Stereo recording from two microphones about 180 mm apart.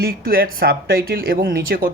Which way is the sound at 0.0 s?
60° right (ahead or behind).